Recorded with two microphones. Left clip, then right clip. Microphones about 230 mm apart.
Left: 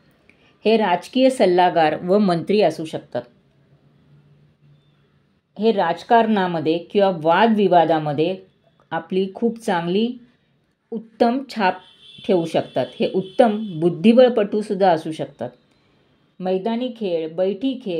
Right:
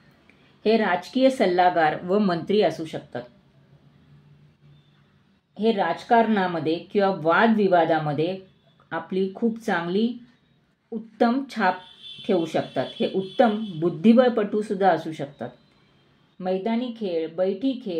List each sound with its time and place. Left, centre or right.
0.6 s speech: left
5.6 s speech: left
11.1 s speech: left